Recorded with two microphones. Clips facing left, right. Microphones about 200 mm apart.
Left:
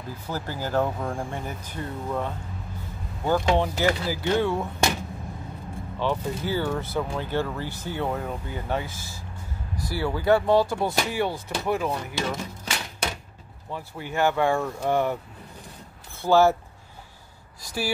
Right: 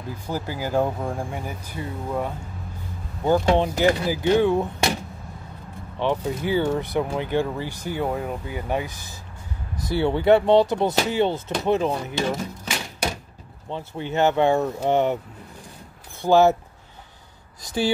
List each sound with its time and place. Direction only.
0.3 s speech: 10° right (ahead or behind)
5.9 s speech: 20° right (ahead or behind)
16.2 s speech: 20° right (ahead or behind)
17.6 s speech: 20° right (ahead or behind)